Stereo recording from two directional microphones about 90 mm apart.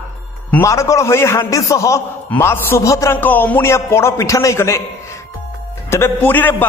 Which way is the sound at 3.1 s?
20° left (ahead or behind).